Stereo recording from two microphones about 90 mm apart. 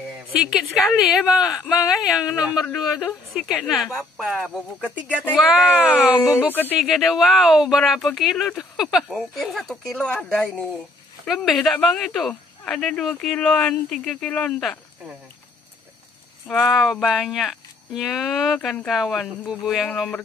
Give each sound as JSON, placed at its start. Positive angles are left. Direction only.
{"t": 0.4, "sound": "speech", "side_deg": -10}
{"t": 4.7, "sound": "speech", "side_deg": 20}
{"t": 5.8, "sound": "speech", "side_deg": -10}
{"t": 6.8, "sound": "speech", "side_deg": 0}
{"t": 9.9, "sound": "speech", "side_deg": 10}
{"t": 16.6, "sound": "speech", "side_deg": -5}